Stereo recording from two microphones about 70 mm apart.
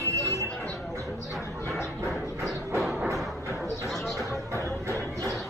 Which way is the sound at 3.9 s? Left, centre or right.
Centre.